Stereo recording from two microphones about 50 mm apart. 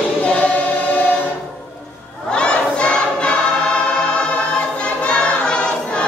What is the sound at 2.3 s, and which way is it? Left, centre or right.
Crowd, centre.